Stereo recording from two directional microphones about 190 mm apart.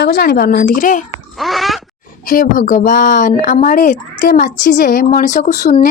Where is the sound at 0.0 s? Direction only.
55° left (ahead or behind).